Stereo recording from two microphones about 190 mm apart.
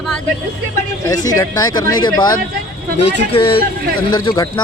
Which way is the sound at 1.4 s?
20° left (ahead or behind).